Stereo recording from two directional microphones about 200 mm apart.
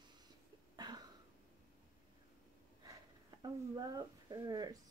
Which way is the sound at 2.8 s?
20° right (ahead or behind).